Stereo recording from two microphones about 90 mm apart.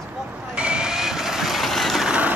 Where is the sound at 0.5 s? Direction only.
10° right (ahead or behind).